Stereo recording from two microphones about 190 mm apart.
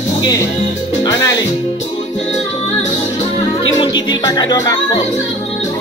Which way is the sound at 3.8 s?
25° left (ahead or behind).